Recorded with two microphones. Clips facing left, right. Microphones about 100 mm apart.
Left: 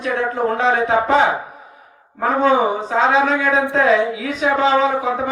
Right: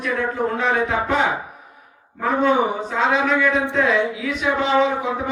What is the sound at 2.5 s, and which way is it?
Speech, 35° left (ahead or behind).